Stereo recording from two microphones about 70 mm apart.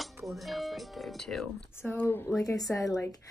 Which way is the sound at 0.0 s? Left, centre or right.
Centre.